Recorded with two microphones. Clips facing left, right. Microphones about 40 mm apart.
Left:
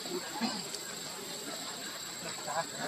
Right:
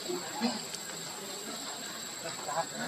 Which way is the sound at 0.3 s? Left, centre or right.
Centre.